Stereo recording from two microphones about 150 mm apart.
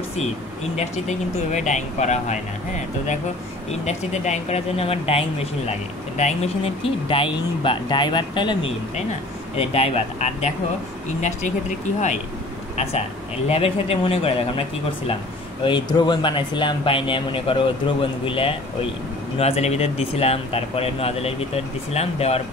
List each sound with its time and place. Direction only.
0.7 s speech: 50° left (ahead or behind)
3.8 s speech: 50° left (ahead or behind); by 8.7 s 30° left (ahead or behind)
9.6 s speech: 45° left (ahead or behind)
13.5 s speech: 40° left (ahead or behind)